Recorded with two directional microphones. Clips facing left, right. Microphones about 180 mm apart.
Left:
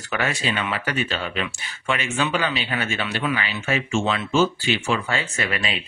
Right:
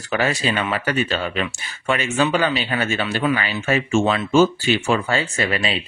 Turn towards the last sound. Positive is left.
turn(degrees=-30)  # may be behind; listen again after turning